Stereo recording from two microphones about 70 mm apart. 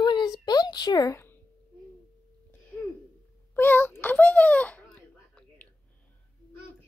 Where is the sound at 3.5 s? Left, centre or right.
Left.